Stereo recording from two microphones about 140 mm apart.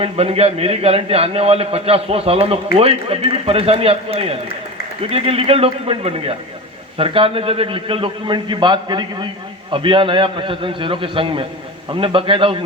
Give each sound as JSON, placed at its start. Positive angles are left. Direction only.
{"t": 0.0, "sound": "a man's voice", "side_deg": -45}